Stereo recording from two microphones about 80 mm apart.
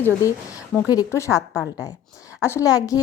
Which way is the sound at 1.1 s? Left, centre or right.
Left.